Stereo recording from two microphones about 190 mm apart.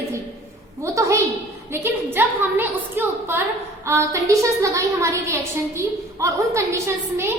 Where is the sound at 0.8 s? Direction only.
15° right (ahead or behind).